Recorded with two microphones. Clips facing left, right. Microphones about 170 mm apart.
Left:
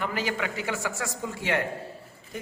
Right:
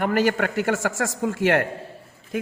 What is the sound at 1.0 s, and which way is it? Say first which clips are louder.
Speech: right 8 dB; 50° right (ahead or behind).